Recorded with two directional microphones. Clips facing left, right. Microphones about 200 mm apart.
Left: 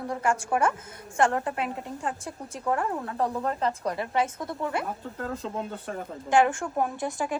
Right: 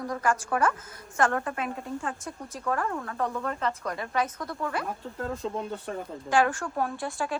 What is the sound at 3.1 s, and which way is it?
A woman's voice, 35° left (ahead or behind).